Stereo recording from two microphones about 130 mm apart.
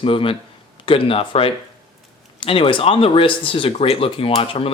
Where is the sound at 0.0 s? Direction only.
40° left (ahead or behind).